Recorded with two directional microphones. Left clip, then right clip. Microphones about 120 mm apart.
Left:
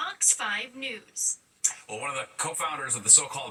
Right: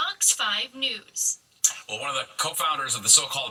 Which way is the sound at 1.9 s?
15° right (ahead or behind).